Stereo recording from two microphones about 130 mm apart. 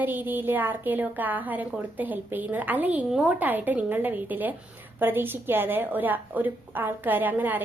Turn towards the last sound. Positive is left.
turn(degrees=-15)  # may be behind; listen again after turning